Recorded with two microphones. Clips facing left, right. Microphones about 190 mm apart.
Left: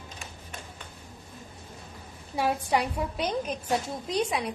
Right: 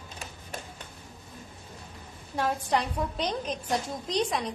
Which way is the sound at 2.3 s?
10° left (ahead or behind).